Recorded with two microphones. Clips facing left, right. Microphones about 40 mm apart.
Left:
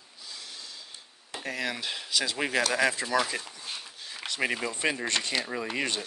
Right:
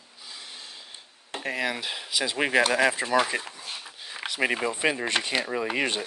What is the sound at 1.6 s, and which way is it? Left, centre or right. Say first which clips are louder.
Speech: right 2 dB; centre.